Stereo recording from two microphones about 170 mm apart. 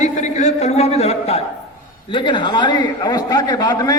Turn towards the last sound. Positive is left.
turn(degrees=20)  # may be behind; listen again after turning